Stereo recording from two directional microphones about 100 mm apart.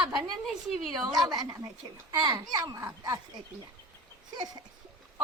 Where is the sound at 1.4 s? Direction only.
35° right (ahead or behind).